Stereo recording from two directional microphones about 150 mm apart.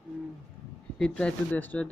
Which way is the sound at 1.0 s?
10° left (ahead or behind).